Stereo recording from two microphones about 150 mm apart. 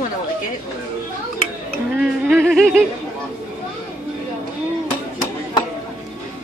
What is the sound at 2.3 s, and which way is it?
Speech, 5° left (ahead or behind).